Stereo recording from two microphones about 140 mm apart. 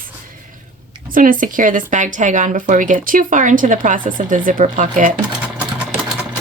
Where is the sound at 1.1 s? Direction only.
75° right (ahead or behind).